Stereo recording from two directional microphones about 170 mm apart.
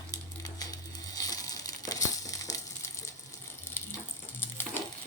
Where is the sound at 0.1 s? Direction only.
20° left (ahead or behind).